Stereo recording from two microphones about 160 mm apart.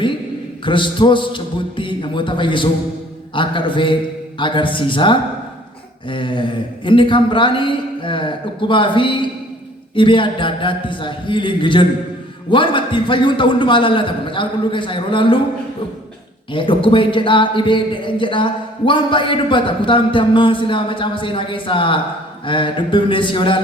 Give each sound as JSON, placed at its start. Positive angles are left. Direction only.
{"t": 0.6, "sound": "speech", "side_deg": 30}
{"t": 16.5, "sound": "speech", "side_deg": 30}